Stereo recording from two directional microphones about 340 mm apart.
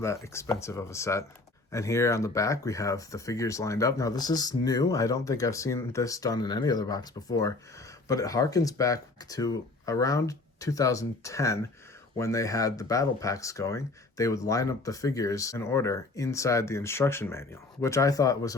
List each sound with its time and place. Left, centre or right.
0.0 s speech: centre